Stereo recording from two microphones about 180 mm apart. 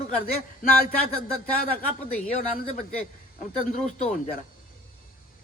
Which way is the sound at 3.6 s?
40° left (ahead or behind).